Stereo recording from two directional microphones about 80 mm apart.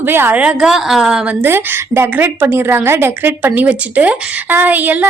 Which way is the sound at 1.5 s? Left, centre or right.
Right.